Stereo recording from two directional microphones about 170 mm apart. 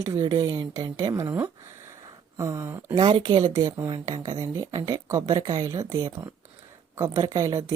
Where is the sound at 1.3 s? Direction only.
10° right (ahead or behind).